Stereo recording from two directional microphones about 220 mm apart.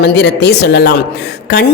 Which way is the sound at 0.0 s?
50° left (ahead or behind).